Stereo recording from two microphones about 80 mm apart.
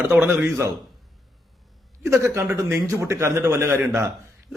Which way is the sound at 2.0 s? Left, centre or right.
Right.